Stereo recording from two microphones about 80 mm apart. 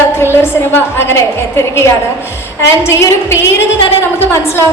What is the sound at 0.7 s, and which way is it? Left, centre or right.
A woman's voice, left.